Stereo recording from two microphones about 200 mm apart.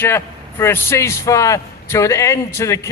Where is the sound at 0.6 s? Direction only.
10° left (ahead or behind).